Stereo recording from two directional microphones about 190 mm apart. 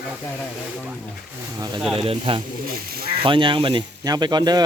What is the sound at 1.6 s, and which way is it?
Speech, 20° right (ahead or behind).